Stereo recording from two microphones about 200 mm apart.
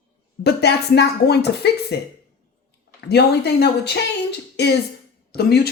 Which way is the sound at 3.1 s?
55° left (ahead or behind).